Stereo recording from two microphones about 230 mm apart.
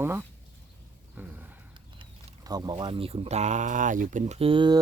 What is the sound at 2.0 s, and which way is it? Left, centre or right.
Speech, centre.